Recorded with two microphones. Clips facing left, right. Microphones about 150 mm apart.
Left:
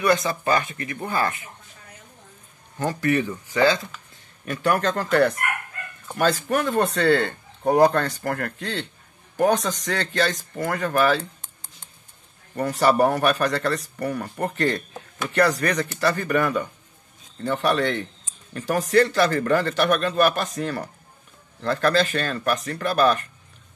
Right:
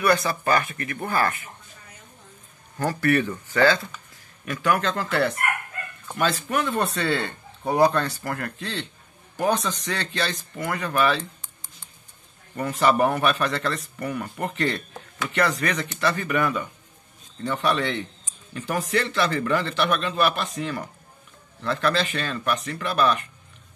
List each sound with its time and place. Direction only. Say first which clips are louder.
0.0 s speech: left 1 dB; 20° left (ahead or behind)
2.8 s speech: even; 20° left (ahead or behind)
4.5 s a man's voice: left 1 dB; 35° left (ahead or behind)
6.1 s speech: left 3 dB; 40° left (ahead or behind)
12.5 s a man's voice: left 2 dB; 35° left (ahead or behind)